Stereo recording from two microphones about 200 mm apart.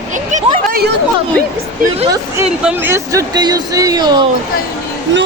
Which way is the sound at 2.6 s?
10° right (ahead or behind).